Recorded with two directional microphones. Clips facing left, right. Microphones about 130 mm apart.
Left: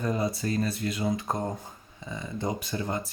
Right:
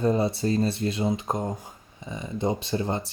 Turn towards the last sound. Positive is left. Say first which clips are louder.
# right 4 dB
turn(degrees=-30)  # may be behind; listen again after turning